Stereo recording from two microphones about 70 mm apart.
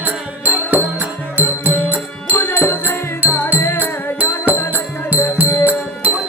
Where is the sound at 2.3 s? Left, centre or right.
Left.